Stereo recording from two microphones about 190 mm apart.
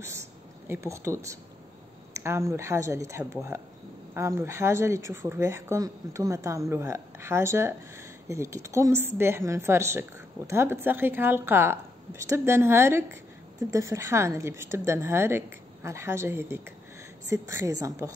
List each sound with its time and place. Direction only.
0.0 s a woman's voice: 15° right (ahead or behind)